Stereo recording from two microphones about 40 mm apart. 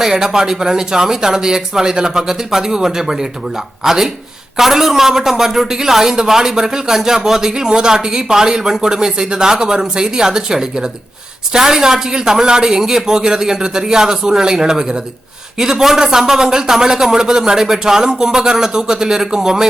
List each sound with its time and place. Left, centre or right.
0.0 s a man's voice: centre